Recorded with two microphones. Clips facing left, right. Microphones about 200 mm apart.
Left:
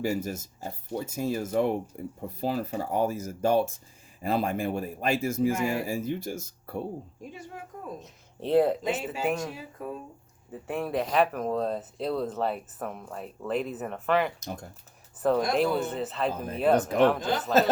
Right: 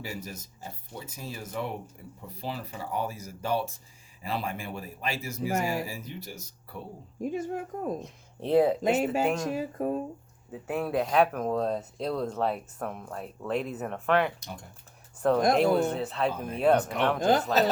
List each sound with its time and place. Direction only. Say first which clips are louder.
0.0 s speech: left 9 dB; 50° left (ahead or behind)
7.2 s speech: right 10 dB; 50° right (ahead or behind)
8.0 s speech: even; centre (ahead or behind)
9.6 s speech: right 8 dB; 50° right (ahead or behind)
10.5 s speech: right 1 dB; centre (ahead or behind)